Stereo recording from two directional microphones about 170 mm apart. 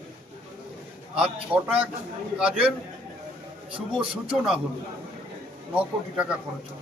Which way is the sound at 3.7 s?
30° right (ahead or behind).